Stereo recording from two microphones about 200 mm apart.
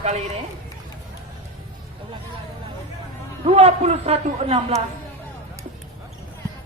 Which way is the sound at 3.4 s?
30° right (ahead or behind).